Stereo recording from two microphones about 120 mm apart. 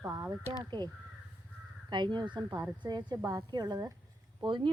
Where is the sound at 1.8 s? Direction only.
40° right (ahead or behind).